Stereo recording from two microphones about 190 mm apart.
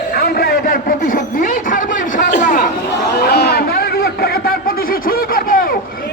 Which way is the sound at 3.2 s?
55° left (ahead or behind).